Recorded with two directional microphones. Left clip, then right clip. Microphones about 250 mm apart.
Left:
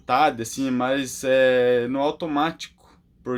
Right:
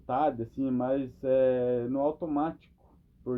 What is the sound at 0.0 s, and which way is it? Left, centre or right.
Speech, left.